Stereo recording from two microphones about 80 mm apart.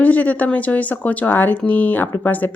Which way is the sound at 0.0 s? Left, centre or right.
Centre.